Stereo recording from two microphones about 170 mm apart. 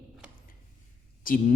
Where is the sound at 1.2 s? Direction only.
55° left (ahead or behind).